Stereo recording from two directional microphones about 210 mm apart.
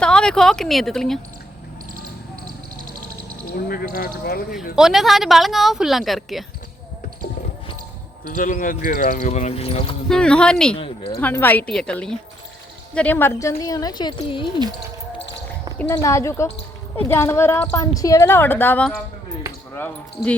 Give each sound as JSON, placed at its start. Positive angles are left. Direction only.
{"t": 0.0, "sound": "speech", "side_deg": 5}
{"t": 3.7, "sound": "speech", "side_deg": 45}
{"t": 4.5, "sound": "speech", "side_deg": 0}
{"t": 8.3, "sound": "speech", "side_deg": 40}
{"t": 10.1, "sound": "speech", "side_deg": 5}
{"t": 10.8, "sound": "speech", "side_deg": 25}
{"t": 11.2, "sound": "a woman's voice", "side_deg": 10}
{"t": 15.8, "sound": "a woman's voice", "side_deg": 15}